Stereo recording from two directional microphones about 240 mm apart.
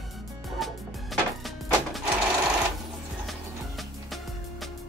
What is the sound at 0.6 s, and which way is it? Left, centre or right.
Music, centre.